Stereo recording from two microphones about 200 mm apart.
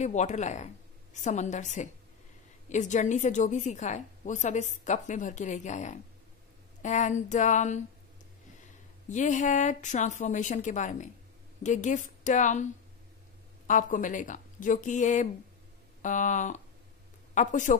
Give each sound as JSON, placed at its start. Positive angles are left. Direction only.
{"t": 0.0, "sound": "a woman's voice", "side_deg": 35}
{"t": 9.1, "sound": "a woman's voice", "side_deg": 40}
{"t": 13.7, "sound": "a woman's voice", "side_deg": 40}